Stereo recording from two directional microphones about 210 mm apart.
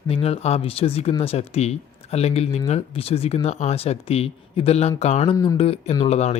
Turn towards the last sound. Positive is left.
turn(degrees=30)  # may be behind; listen again after turning